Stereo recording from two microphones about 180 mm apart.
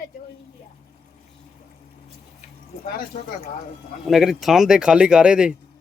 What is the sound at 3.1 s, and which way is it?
Speech, 45° left (ahead or behind).